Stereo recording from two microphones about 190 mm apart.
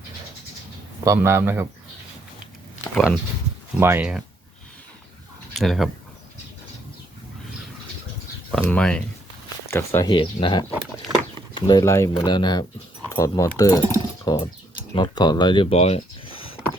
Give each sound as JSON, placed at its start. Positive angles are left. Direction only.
{"t": 1.0, "sound": "a man's voice", "side_deg": -15}
{"t": 2.9, "sound": "speech", "side_deg": 0}
{"t": 3.8, "sound": "a man's voice", "side_deg": -10}
{"t": 5.5, "sound": "speech", "side_deg": 0}
{"t": 8.4, "sound": "speech", "side_deg": 5}
{"t": 10.1, "sound": "speech", "side_deg": 25}